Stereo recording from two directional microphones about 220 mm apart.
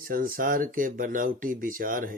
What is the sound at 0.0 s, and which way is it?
Speech, 40° right (ahead or behind).